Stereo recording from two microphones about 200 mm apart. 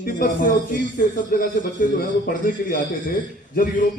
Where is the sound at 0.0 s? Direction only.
45° left (ahead or behind).